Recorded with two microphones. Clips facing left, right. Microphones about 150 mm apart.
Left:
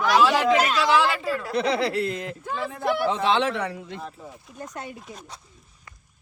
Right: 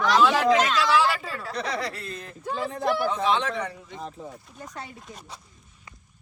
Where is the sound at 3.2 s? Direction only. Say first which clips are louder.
Left 2 dB; 80° left.